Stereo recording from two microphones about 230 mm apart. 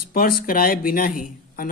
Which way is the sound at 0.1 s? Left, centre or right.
Left.